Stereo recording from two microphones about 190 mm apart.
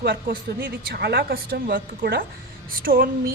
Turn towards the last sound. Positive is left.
turn(degrees=-50)  # may be behind; listen again after turning